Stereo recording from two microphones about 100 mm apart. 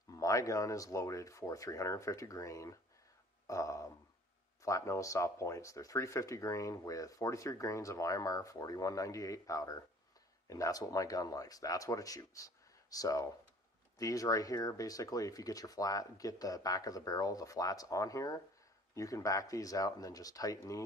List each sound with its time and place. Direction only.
0.1 s speech: 35° left (ahead or behind)